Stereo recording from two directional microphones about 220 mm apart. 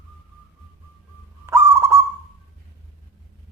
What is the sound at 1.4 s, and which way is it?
Owl, 10° right (ahead or behind).